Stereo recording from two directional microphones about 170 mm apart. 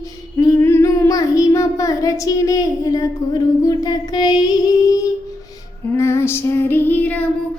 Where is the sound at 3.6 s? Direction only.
25° left (ahead or behind).